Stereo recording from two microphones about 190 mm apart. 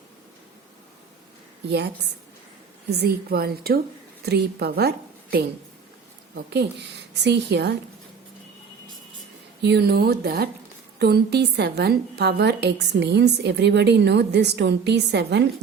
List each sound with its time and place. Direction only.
2.9 s a woman's voice: 55° right (ahead or behind)
9.6 s a woman's voice: 60° right (ahead or behind)